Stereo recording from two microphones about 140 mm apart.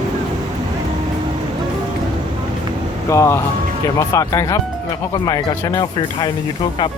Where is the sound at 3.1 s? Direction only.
20° left (ahead or behind).